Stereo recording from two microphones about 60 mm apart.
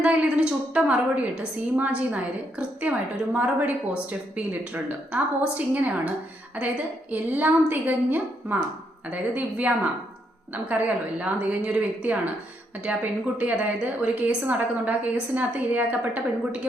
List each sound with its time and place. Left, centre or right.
0.0 s a woman's voice: centre